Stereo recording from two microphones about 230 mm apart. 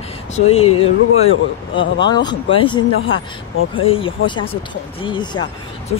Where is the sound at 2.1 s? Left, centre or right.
Centre.